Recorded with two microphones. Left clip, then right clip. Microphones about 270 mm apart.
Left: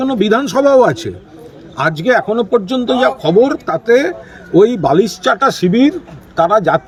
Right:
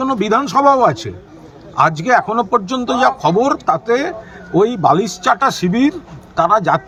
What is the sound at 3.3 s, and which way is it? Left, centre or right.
A man's voice, centre.